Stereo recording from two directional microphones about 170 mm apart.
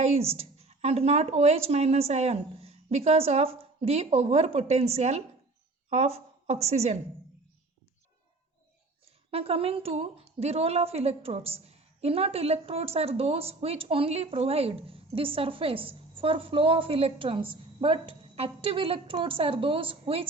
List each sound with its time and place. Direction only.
0.0 s a woman's voice: 40° right (ahead or behind)
9.0 s a woman's voice: 35° right (ahead or behind)